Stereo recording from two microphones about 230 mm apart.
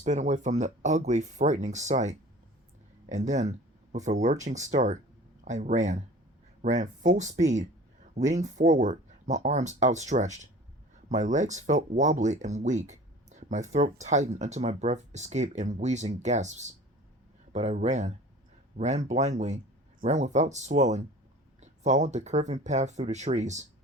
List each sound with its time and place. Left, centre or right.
0.0 s speech: right